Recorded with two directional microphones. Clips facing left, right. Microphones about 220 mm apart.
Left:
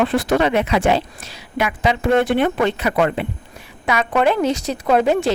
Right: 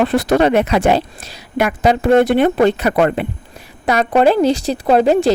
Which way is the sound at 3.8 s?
40° right (ahead or behind).